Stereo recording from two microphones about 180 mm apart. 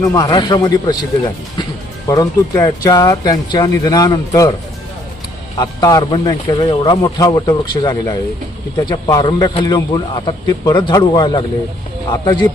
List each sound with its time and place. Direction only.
0.0 s a man's voice: 20° left (ahead or behind)
5.5 s a man's voice: 20° left (ahead or behind)